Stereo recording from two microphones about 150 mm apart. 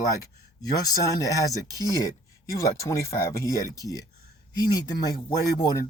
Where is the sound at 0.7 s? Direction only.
20° left (ahead or behind).